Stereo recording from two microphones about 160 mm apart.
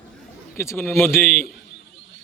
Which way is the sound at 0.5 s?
15° left (ahead or behind).